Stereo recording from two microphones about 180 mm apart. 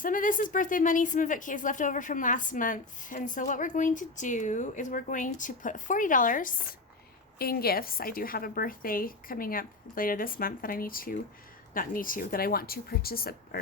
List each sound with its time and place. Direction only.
0.0 s speech: 50° left (ahead or behind)
7.3 s speech: 60° left (ahead or behind)